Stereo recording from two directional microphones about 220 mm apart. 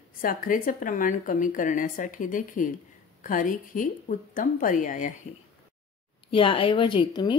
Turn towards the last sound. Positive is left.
turn(degrees=20)  # may be behind; listen again after turning